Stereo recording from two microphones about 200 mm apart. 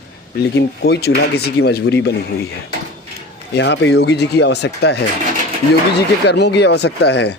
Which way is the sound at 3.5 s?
60° left (ahead or behind).